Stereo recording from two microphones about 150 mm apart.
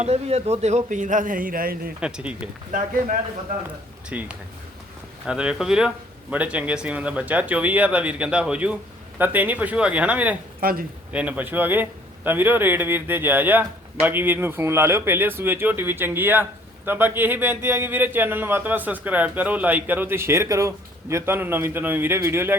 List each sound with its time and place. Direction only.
0.0 s speech: 45° right (ahead or behind); by 1.9 s 80° right
2.0 s speech: 5° right (ahead or behind)
4.1 s speech: 10° right (ahead or behind)
10.6 s speech: 75° right (ahead or behind)
11.1 s speech: 10° right (ahead or behind)